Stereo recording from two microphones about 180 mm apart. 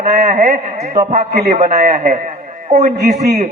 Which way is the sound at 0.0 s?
40° right (ahead or behind).